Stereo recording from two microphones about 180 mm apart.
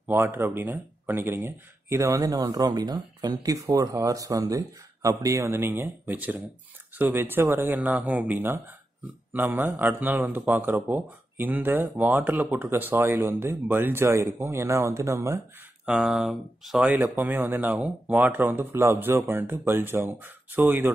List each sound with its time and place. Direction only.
0.1 s a man's voice: 10° right (ahead or behind)